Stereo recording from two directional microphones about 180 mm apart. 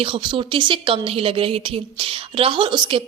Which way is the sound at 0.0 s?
30° right (ahead or behind).